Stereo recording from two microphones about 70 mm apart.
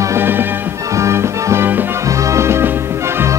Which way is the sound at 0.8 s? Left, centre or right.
Right.